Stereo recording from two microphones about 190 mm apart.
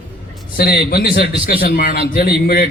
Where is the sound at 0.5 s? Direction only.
55° left (ahead or behind).